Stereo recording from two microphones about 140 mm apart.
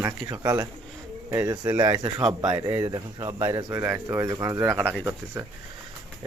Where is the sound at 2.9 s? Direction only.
30° right (ahead or behind).